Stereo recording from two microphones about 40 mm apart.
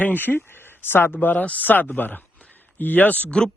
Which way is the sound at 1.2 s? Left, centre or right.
Left.